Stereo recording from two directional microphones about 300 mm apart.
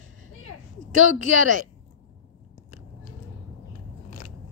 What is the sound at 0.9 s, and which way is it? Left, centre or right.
Speech, left.